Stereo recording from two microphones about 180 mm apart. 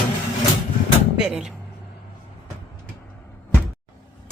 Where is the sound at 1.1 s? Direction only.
5° right (ahead or behind).